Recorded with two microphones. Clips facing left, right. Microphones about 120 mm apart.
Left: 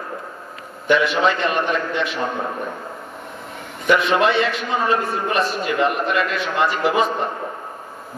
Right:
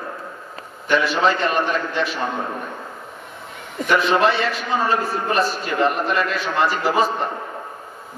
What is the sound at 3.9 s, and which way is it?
A man's voice, 35° right (ahead or behind).